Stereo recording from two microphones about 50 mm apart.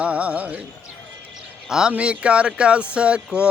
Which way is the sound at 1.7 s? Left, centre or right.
Centre.